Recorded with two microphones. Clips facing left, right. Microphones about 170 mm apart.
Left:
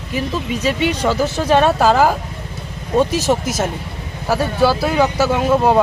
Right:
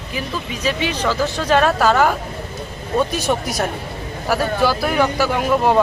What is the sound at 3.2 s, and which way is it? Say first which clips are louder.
Speech: left 2 dB; 20° left (ahead or behind).